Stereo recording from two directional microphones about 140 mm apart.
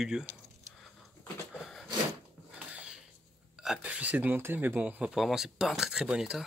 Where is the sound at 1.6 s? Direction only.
Centre (ahead or behind).